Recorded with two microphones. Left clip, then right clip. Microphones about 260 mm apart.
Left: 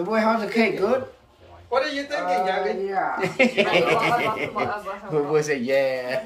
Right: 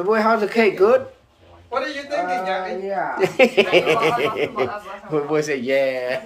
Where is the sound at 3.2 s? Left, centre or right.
Centre.